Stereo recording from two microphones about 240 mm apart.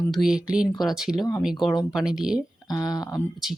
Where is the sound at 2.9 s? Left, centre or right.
Centre.